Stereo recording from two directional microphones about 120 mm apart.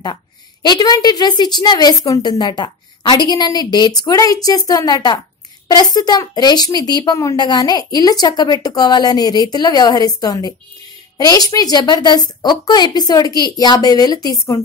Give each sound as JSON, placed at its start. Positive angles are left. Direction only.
{"t": 0.0, "sound": "a woman's voice", "side_deg": 35}